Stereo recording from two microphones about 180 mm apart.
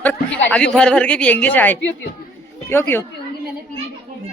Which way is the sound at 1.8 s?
90° left.